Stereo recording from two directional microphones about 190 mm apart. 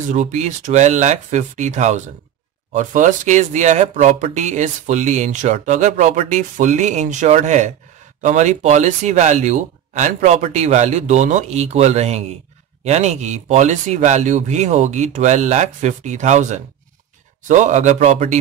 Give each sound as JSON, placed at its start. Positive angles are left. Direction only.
{"t": 0.1, "sound": "speech", "side_deg": -35}